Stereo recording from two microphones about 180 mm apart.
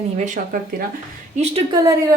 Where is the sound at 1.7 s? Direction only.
20° right (ahead or behind).